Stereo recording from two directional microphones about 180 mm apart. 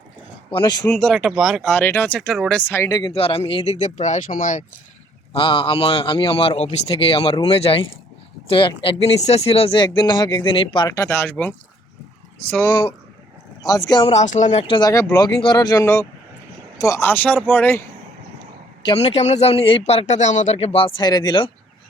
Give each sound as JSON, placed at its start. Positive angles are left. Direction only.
{"t": 0.5, "sound": "a man's voice", "side_deg": 25}
{"t": 0.9, "sound": "speech", "side_deg": 5}
{"t": 3.1, "sound": "a man's voice", "side_deg": 30}
{"t": 5.3, "sound": "a man's voice", "side_deg": 30}
{"t": 10.8, "sound": "a man's voice", "side_deg": 15}
{"t": 14.1, "sound": "a man's voice", "side_deg": 40}
{"t": 14.8, "sound": "a man's voice", "side_deg": 20}
{"t": 18.9, "sound": "a man's voice", "side_deg": 35}